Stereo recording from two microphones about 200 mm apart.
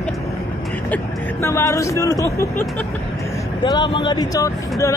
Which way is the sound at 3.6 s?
25° left (ahead or behind).